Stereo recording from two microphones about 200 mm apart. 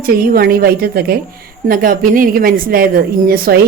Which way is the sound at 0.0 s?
50° right (ahead or behind).